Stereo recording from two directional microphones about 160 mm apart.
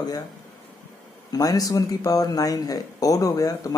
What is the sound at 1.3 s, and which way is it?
Speech, 20° left (ahead or behind).